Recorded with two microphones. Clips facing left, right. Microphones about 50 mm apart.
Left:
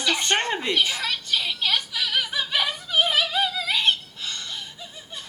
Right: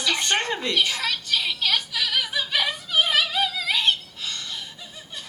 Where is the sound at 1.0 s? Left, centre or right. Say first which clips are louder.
Right 1 dB; centre.